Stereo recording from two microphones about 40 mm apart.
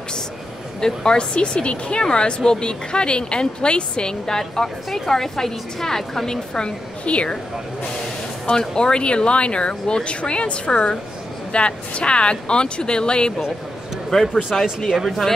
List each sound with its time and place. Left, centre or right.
0.7 s a woman's voice: centre
7.1 s speech: left
8.5 s speech: centre
14.1 s speech: centre